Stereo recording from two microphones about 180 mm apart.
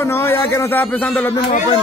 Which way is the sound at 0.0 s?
15° left (ahead or behind).